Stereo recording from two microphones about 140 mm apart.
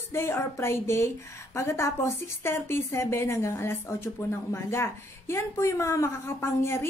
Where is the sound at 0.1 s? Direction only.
20° left (ahead or behind).